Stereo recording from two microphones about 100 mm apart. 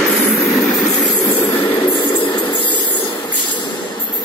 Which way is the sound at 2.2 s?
55° left (ahead or behind).